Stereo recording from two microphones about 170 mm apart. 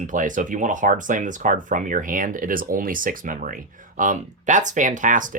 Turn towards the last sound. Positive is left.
turn(degrees=-50)  # may be behind; listen again after turning